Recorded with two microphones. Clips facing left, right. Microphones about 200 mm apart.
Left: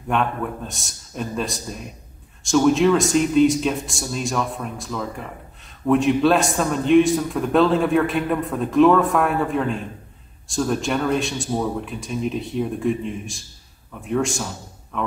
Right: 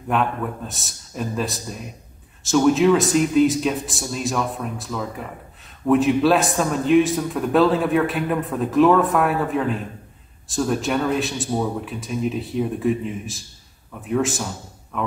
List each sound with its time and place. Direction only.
0.1 s a man's voice: centre (ahead or behind)